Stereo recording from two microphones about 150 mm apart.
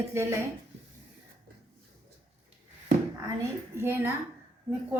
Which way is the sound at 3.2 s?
20° right (ahead or behind).